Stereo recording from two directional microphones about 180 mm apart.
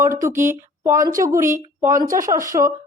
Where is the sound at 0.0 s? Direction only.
15° right (ahead or behind).